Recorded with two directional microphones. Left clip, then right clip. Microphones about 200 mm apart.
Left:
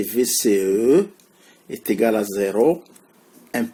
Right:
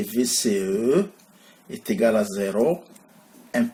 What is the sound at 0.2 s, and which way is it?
Speech, 45° left (ahead or behind).